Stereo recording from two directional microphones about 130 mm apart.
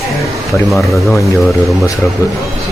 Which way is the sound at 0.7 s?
Centre (ahead or behind).